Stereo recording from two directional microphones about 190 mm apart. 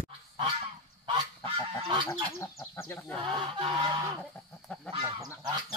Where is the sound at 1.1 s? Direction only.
25° right (ahead or behind).